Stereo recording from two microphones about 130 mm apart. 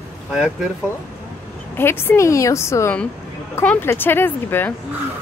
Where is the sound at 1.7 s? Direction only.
15° left (ahead or behind).